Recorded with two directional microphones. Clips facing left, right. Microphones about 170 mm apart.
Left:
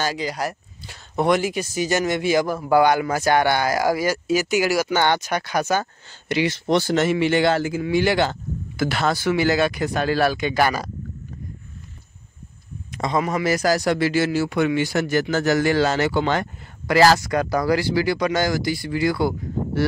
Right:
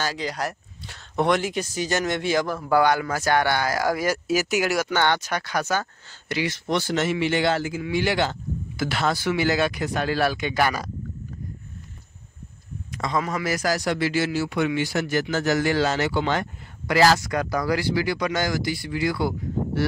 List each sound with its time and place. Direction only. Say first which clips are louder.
0.0 s speech: left 3 dB; 10° left (ahead or behind)
4.0 s speech: left 2 dB; centre (ahead or behind); by 10.9 s 35° left (ahead or behind)
12.9 s speech: left 4 dB; 20° left (ahead or behind); by 19.8 s 40° left (ahead or behind)